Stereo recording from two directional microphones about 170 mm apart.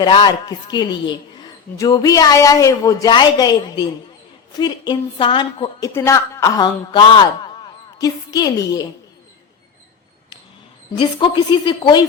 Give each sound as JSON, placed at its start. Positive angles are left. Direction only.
{"t": 0.0, "sound": "a woman's voice", "side_deg": 25}
{"t": 5.9, "sound": "a man's voice", "side_deg": 15}
{"t": 10.9, "sound": "a woman's voice", "side_deg": 30}